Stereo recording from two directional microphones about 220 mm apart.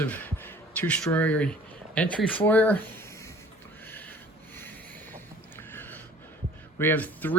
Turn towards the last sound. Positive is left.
turn(degrees=10)  # may be behind; listen again after turning